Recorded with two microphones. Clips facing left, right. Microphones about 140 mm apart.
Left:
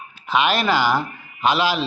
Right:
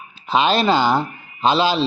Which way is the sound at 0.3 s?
30° right (ahead or behind).